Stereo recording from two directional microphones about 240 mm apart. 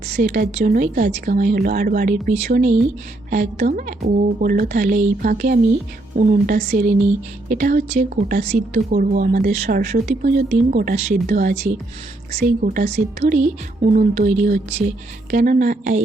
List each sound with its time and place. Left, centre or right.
0.2 s speech: right